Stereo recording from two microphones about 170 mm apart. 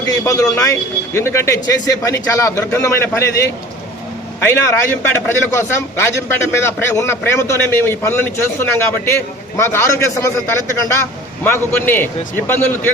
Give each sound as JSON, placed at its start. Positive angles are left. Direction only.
{"t": 0.5, "sound": "a man's voice", "side_deg": 15}
{"t": 4.4, "sound": "a man's voice", "side_deg": 15}
{"t": 11.4, "sound": "a man's voice", "side_deg": 15}